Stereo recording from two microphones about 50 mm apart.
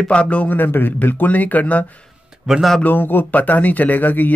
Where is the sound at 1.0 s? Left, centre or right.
Left.